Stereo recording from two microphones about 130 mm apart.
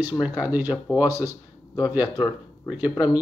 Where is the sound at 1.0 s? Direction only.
25° left (ahead or behind).